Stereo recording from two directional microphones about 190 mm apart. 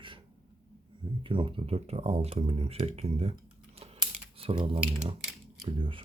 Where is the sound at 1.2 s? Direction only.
25° right (ahead or behind).